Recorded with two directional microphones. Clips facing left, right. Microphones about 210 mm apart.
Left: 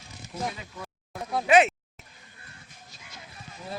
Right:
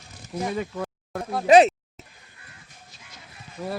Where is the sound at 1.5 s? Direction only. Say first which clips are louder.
Right 6 dB; 35° right (ahead or behind).